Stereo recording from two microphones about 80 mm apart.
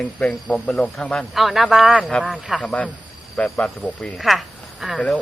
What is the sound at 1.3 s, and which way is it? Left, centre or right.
Speech, centre.